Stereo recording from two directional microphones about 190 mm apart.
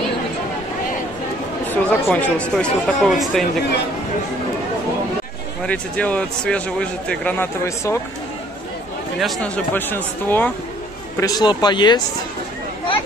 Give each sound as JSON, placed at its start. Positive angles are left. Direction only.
{"t": 1.7, "sound": "speech", "side_deg": 10}
{"t": 5.6, "sound": "speech", "side_deg": 5}
{"t": 9.2, "sound": "speech", "side_deg": 5}